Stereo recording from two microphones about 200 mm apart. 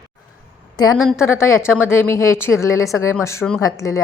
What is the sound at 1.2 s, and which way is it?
A woman's voice, 15° left (ahead or behind).